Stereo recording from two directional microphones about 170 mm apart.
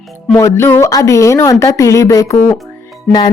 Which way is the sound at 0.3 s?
15° left (ahead or behind).